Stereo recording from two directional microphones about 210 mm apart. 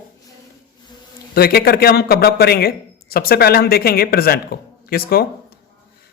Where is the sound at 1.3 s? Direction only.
50° left (ahead or behind).